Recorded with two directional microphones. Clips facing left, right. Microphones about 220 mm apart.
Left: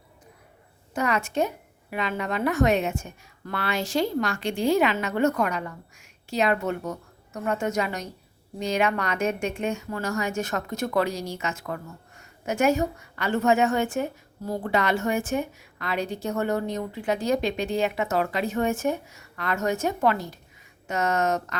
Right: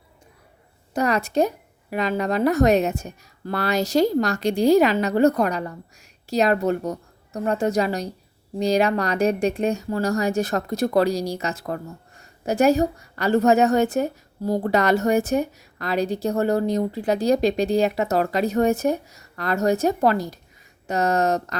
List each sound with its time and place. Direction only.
0.9 s speech: 35° right (ahead or behind)